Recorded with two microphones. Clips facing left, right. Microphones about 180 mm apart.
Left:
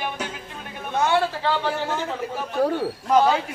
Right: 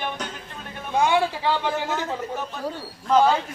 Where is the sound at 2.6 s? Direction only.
60° left (ahead or behind).